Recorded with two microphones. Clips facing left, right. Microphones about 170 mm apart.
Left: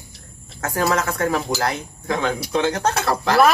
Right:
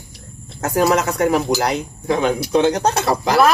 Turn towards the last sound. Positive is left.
turn(degrees=-15)  # may be behind; listen again after turning